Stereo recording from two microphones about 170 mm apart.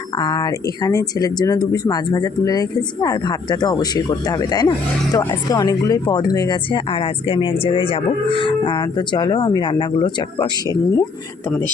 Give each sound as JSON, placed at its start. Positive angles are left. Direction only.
{"t": 0.2, "sound": "speech", "side_deg": 25}